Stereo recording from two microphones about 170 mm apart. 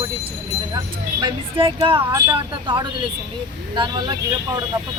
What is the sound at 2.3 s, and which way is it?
Speech, 30° right (ahead or behind).